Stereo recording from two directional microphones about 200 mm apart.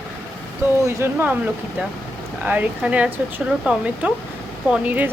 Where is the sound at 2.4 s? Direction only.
10° right (ahead or behind).